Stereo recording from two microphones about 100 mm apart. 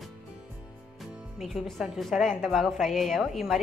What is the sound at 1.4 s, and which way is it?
A woman's voice, centre (ahead or behind).